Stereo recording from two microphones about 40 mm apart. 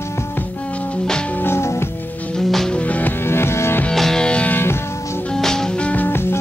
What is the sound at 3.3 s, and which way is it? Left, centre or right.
Music, left.